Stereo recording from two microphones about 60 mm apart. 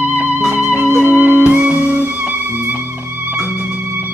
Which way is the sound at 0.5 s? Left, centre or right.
Right.